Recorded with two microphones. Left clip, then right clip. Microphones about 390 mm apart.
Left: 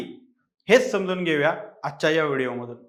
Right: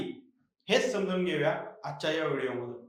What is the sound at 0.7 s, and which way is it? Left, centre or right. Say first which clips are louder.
Speech: left 9 dB; left.